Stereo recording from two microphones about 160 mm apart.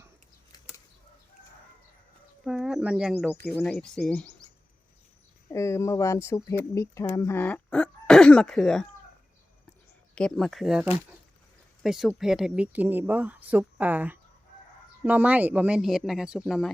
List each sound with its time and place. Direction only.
2.4 s speech: 5° right (ahead or behind)
3.4 s speech: 10° left (ahead or behind)
5.5 s speech: 15° left (ahead or behind)
10.2 s speech: 5° left (ahead or behind)